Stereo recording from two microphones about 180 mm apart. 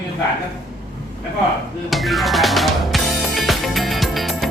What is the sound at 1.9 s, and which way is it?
Music, centre (ahead or behind).